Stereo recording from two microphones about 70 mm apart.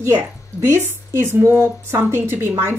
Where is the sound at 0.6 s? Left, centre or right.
Right.